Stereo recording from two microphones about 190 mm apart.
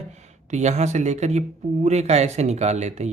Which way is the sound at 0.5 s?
35° right (ahead or behind).